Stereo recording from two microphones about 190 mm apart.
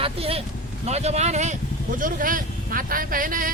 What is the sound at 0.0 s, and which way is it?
Vehicle, 30° right (ahead or behind).